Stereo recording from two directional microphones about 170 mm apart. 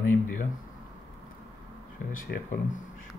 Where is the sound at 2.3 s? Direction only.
70° left (ahead or behind).